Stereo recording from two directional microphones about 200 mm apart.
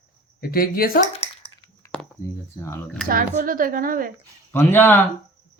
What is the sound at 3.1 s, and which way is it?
Speech, 45° right (ahead or behind).